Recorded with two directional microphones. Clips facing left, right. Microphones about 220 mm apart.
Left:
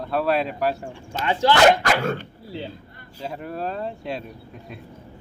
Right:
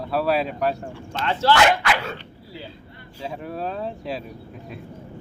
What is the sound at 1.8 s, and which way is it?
Dog, 45° left (ahead or behind).